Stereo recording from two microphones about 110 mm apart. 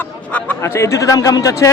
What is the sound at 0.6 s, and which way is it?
A man's voice, 25° left (ahead or behind).